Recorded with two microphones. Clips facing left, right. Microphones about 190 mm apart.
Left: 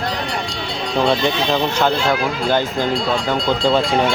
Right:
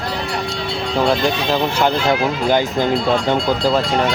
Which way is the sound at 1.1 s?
5° right (ahead or behind).